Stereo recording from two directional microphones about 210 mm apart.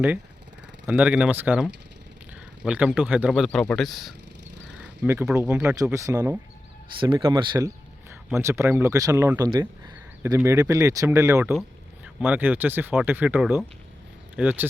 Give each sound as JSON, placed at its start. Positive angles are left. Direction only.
{"t": 0.9, "sound": "speech", "side_deg": -5}
{"t": 2.6, "sound": "speech", "side_deg": -5}
{"t": 4.8, "sound": "speech", "side_deg": -10}
{"t": 7.0, "sound": "speech", "side_deg": -20}